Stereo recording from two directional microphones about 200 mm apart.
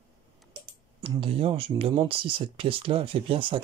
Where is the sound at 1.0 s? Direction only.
25° right (ahead or behind).